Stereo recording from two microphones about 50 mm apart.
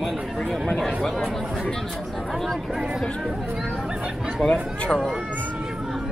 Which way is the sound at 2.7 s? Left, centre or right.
Centre.